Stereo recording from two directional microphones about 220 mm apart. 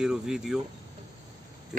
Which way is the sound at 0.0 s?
5° right (ahead or behind).